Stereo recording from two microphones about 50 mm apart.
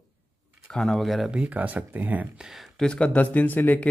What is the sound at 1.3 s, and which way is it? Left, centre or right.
Speech, right.